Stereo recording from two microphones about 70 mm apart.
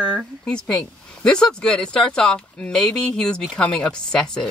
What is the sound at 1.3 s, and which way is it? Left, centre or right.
Speech, centre.